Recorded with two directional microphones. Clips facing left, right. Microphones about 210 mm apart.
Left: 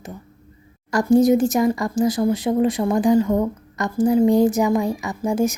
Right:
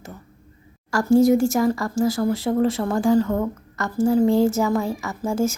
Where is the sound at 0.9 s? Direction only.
20° left (ahead or behind).